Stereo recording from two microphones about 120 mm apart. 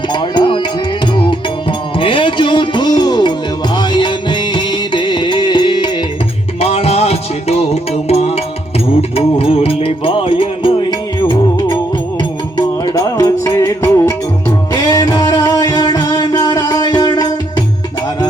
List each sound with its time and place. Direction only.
0.1 s music: 40° left (ahead or behind)
6.6 s music: 55° left (ahead or behind)
12.5 s music: 30° left (ahead or behind)